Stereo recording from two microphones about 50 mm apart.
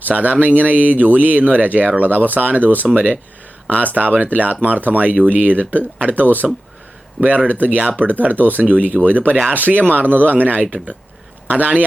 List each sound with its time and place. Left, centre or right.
0.0 s speech: right